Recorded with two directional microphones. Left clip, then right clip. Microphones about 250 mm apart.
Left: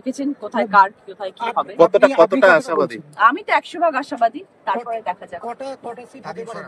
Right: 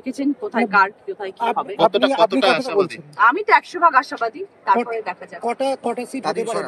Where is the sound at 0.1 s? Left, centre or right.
Centre.